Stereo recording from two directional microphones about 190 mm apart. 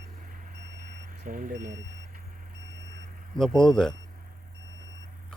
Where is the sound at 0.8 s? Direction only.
45° right (ahead or behind).